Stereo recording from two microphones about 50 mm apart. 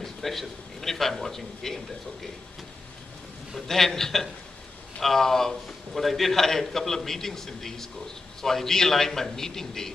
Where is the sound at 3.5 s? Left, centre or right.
Centre.